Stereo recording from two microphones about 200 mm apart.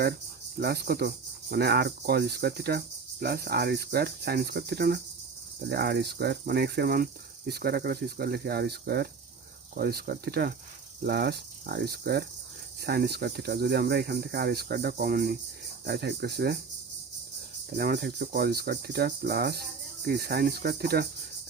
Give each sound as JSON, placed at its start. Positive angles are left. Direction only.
{"t": 0.5, "sound": "speech", "side_deg": -50}
{"t": 17.7, "sound": "speech", "side_deg": -50}